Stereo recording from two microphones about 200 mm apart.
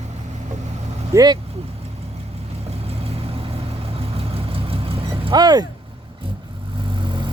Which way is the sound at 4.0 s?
30° right (ahead or behind).